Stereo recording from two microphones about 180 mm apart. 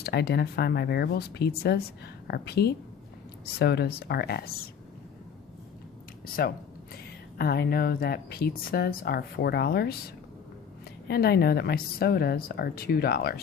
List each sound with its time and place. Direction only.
0.0 s speech: 65° left (ahead or behind)
6.9 s speech: 60° left (ahead or behind)
11.1 s speech: 60° left (ahead or behind)